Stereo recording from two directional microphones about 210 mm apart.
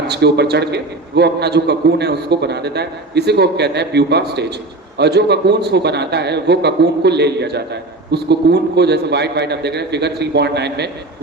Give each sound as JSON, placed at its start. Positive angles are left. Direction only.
{"t": 0.1, "sound": "a man's voice", "side_deg": -50}